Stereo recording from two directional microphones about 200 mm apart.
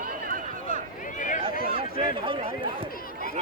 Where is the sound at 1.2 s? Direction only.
40° left (ahead or behind).